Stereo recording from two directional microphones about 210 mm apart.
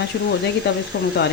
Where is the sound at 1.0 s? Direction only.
50° left (ahead or behind).